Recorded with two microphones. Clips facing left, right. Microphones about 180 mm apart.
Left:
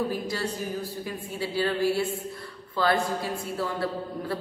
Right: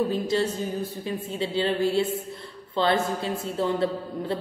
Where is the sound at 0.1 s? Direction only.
25° right (ahead or behind).